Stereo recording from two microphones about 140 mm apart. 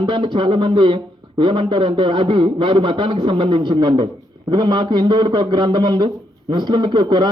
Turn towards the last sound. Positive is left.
turn(degrees=-35)  # may be behind; listen again after turning